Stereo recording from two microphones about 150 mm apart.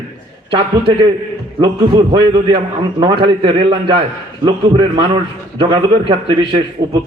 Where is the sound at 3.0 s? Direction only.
35° right (ahead or behind).